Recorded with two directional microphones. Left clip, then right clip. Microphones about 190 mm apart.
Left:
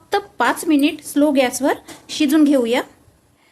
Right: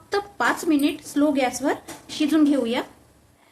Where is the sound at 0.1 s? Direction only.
45° left (ahead or behind).